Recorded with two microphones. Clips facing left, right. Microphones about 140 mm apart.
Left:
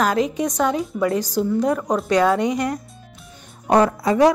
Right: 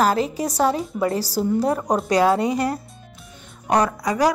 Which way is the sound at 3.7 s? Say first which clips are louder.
Left 4 dB; 25° left (ahead or behind).